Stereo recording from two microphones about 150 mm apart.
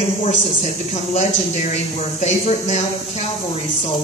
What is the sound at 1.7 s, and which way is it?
Speech, 50° left (ahead or behind).